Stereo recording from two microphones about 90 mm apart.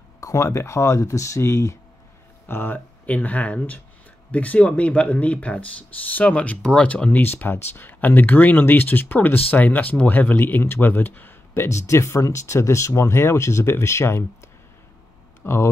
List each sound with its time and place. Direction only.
0.2 s speech: 35° left (ahead or behind)
15.4 s speech: 30° left (ahead or behind)